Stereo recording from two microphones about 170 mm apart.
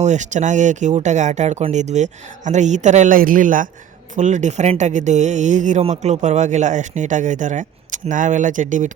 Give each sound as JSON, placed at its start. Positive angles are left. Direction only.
{"t": 0.0, "sound": "speech", "side_deg": -45}